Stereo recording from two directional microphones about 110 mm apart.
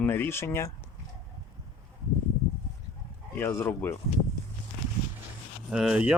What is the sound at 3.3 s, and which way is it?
Speech, 20° left (ahead or behind).